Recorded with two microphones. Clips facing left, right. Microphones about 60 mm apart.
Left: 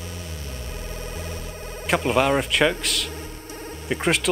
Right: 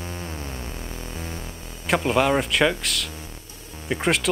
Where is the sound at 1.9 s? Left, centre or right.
Centre.